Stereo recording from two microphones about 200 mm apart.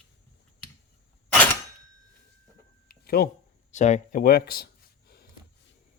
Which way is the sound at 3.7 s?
35° left (ahead or behind).